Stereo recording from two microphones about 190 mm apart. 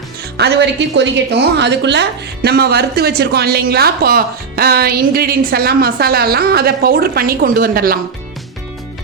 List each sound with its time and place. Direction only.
0.3 s a woman's voice: 60° right (ahead or behind)